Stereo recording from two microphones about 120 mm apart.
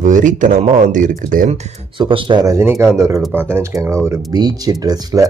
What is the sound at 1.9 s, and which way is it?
Speech, 40° right (ahead or behind).